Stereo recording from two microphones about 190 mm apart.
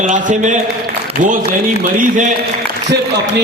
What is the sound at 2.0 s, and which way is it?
Speech, 40° right (ahead or behind).